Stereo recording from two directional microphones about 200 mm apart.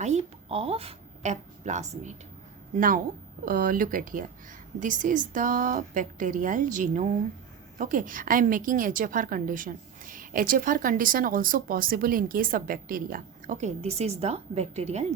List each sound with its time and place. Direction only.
0.0 s a woman's voice: 30° right (ahead or behind)